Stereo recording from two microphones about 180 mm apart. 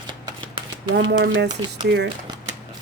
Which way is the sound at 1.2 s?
70° right (ahead or behind).